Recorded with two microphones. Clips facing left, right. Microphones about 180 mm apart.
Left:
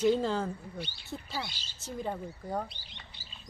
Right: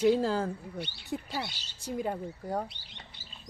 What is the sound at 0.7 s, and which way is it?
Speech, 60° right (ahead or behind).